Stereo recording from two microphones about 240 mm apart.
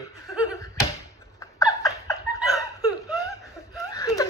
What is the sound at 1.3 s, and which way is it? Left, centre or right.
Laughter, centre.